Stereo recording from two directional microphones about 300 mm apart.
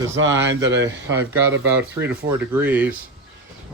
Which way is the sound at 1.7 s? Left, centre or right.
Centre.